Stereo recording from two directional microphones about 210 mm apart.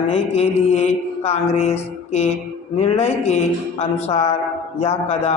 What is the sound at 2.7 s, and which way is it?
Mantra, 30° left (ahead or behind).